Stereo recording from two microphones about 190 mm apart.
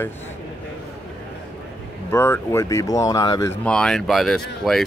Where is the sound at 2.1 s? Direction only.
15° left (ahead or behind).